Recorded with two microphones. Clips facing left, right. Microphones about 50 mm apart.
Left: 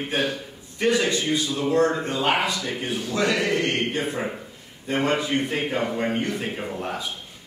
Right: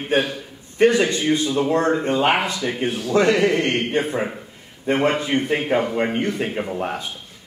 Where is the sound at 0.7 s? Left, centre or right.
Right.